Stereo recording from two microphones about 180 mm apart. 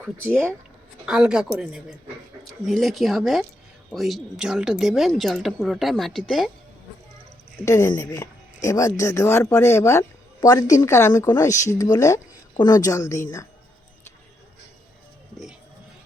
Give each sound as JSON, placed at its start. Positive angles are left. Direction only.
{"t": 0.0, "sound": "speech", "side_deg": -10}
{"t": 7.6, "sound": "a woman's voice", "side_deg": 15}